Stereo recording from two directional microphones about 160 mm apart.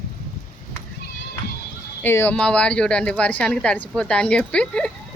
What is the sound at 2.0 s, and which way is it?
Speech, 15° left (ahead or behind).